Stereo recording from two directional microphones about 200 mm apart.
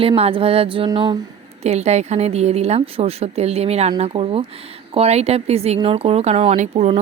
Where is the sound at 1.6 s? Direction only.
35° right (ahead or behind).